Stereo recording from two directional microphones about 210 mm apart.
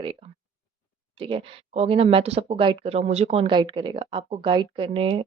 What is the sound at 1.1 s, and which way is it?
A woman's voice, 25° right (ahead or behind).